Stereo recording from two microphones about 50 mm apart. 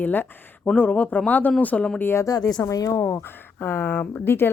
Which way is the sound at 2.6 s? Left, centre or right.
Left.